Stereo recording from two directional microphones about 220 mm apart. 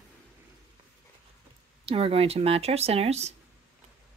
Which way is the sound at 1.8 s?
25° right (ahead or behind).